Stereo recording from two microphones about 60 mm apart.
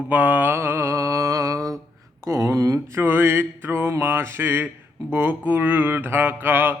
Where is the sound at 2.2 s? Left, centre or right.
Right.